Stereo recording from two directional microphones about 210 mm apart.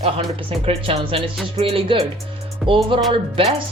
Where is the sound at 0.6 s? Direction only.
30° right (ahead or behind).